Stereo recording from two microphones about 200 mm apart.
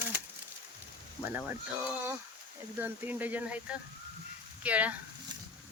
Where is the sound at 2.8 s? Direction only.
10° right (ahead or behind).